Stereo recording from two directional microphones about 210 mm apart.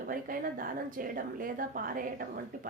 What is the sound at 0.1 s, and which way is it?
A woman's voice, 45° right (ahead or behind).